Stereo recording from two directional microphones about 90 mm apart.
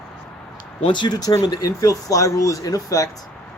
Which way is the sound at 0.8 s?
60° left (ahead or behind).